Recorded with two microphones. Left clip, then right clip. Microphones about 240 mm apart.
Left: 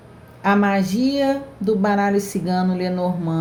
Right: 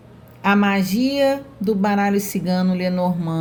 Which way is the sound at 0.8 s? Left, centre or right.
Right.